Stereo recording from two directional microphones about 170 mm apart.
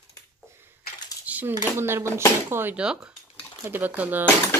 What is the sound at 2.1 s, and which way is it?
Speech, 15° left (ahead or behind).